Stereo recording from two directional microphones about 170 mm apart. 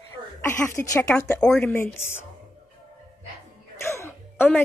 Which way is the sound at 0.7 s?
15° left (ahead or behind).